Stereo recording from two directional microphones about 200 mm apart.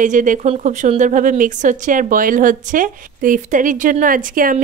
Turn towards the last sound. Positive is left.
turn(degrees=-40)  # may be behind; listen again after turning